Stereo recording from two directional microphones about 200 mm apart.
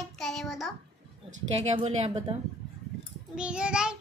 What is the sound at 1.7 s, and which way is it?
Speech, 30° right (ahead or behind).